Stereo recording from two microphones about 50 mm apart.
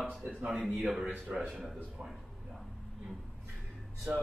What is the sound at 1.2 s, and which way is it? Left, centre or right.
Speech, right.